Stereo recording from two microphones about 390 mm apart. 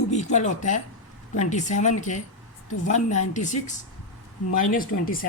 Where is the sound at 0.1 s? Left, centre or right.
Centre.